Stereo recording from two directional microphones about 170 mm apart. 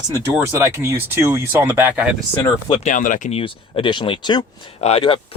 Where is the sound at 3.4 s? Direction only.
30° left (ahead or behind).